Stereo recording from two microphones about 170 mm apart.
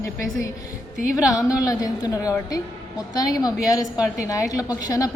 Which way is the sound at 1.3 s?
20° left (ahead or behind).